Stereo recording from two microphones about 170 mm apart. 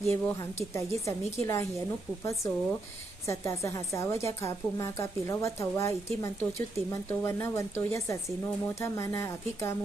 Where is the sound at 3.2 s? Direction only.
15° left (ahead or behind).